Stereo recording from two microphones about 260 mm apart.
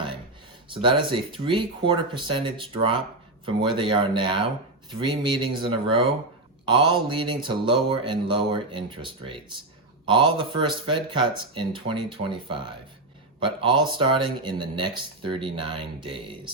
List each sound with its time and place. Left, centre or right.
0.7 s speech: centre